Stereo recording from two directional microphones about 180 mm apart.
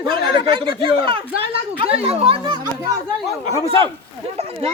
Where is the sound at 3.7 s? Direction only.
30° right (ahead or behind).